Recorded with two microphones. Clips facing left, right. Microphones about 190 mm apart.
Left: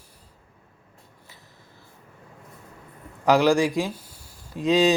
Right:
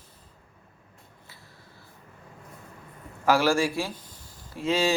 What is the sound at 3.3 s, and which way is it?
Speech, 15° left (ahead or behind).